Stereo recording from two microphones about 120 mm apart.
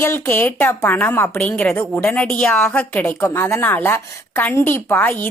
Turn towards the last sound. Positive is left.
turn(degrees=15)  # may be behind; listen again after turning